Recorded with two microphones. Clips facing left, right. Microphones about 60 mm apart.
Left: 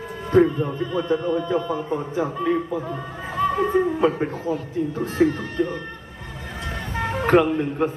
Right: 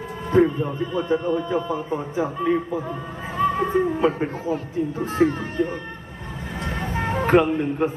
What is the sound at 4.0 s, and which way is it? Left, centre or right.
Speech, right.